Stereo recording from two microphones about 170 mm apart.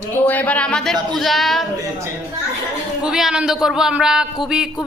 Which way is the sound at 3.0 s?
5° right (ahead or behind).